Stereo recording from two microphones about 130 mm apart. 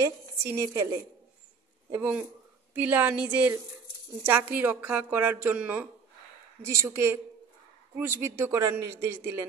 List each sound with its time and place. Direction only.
0.0 s a woman's voice: 20° right (ahead or behind)
1.9 s a woman's voice: 15° right (ahead or behind)